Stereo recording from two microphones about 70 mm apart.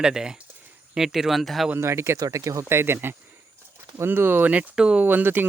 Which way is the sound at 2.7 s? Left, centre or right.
Right.